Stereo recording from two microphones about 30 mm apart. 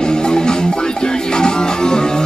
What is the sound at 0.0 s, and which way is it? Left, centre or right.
Music, left.